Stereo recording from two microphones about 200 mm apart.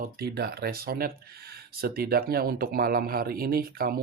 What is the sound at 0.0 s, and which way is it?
Speech, 50° right (ahead or behind).